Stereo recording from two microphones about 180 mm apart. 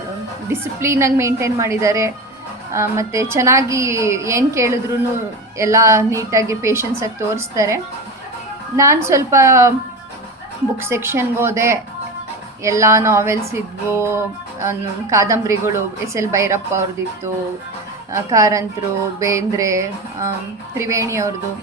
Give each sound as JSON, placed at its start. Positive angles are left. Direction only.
{"t": 0.4, "sound": "a woman's voice", "side_deg": -15}
{"t": 10.8, "sound": "a woman's voice", "side_deg": -15}
{"t": 18.1, "sound": "a woman's voice", "side_deg": -15}